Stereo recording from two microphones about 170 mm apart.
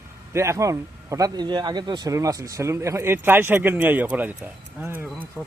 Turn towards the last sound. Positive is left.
turn(degrees=-10)  # may be behind; listen again after turning